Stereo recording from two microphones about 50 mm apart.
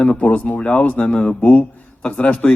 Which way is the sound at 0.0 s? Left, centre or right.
Left.